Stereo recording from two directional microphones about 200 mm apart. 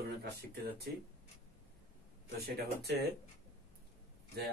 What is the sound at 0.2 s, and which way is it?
Speech, 55° right (ahead or behind).